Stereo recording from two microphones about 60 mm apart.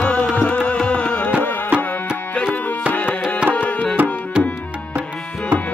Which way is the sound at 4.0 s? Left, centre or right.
Right.